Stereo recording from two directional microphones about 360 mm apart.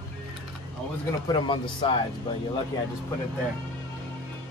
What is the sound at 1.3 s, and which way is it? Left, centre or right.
Speech, centre.